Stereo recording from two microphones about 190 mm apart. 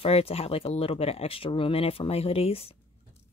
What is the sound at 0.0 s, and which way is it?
Speech, 30° left (ahead or behind).